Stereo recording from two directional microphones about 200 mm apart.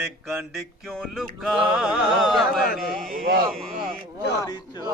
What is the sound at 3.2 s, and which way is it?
Speech, 50° right (ahead or behind).